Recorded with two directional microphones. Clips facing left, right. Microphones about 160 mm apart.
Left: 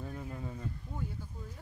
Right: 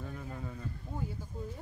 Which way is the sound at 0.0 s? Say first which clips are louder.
Left 1 dB; 20° left (ahead or behind).